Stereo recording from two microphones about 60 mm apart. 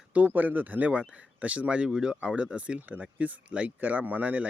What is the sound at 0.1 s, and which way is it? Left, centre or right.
Speech, right.